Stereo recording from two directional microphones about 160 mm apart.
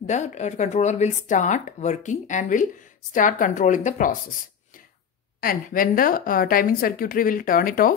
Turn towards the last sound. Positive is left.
turn(degrees=65)  # may be behind; listen again after turning